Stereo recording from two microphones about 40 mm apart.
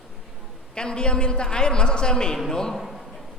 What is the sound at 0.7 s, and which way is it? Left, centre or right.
A man's voice, left.